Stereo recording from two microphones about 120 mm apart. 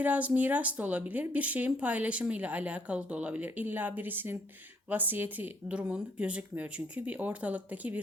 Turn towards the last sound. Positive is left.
turn(degrees=-15)  # may be behind; listen again after turning